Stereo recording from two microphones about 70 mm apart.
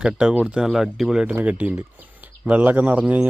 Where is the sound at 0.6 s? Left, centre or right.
Centre.